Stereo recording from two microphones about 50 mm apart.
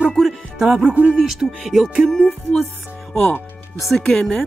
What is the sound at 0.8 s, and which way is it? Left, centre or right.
Speech, right.